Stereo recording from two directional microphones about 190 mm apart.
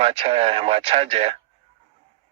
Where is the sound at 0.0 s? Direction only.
30° right (ahead or behind).